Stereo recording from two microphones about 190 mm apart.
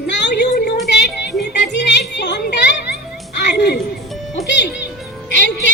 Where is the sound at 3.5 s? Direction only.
60° left (ahead or behind).